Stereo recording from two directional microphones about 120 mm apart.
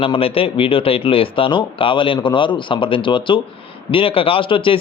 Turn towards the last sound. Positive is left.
turn(degrees=45)  # may be behind; listen again after turning